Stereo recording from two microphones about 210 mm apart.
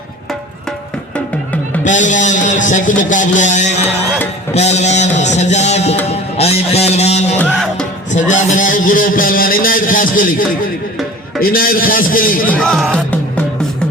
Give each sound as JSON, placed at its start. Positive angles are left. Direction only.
{"t": 1.8, "sound": "a man's voice", "side_deg": 35}
{"t": 7.3, "sound": "music", "side_deg": 5}
{"t": 8.1, "sound": "a man's voice", "side_deg": 35}
{"t": 12.5, "sound": "music", "side_deg": 5}